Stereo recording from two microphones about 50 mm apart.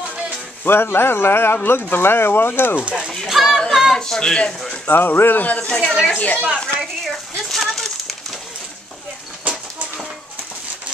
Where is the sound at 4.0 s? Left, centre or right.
Centre.